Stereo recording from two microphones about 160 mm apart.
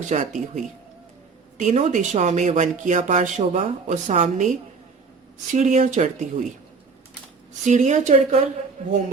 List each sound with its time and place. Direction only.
0.1 s speech: 50° right (ahead or behind)
7.6 s speech: 50° right (ahead or behind)